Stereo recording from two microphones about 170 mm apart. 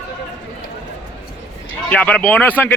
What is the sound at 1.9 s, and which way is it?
Speech, 10° left (ahead or behind).